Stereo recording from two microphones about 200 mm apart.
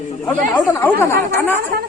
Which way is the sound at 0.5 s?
10° left (ahead or behind).